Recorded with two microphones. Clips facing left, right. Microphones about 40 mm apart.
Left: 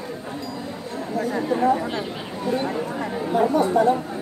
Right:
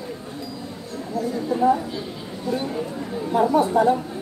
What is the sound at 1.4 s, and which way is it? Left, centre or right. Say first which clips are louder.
Speech: right 2 dB; left.